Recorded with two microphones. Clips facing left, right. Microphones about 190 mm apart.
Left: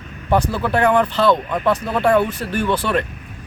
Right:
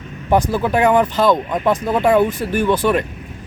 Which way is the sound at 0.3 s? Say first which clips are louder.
Right 2 dB; 15° right (ahead or behind).